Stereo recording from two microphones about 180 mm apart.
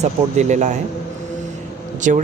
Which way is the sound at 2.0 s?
45° right (ahead or behind).